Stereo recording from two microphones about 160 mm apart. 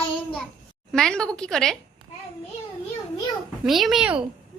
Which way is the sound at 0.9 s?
Centre (ahead or behind).